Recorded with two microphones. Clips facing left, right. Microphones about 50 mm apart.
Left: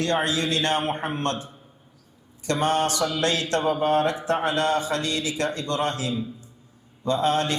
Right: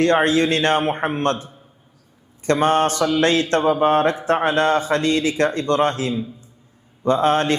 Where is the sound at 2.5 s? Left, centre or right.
Right.